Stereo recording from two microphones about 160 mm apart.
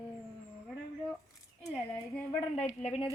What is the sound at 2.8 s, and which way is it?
Speech, 45° left (ahead or behind).